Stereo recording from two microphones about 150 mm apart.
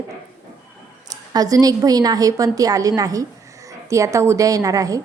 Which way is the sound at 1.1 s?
25° right (ahead or behind).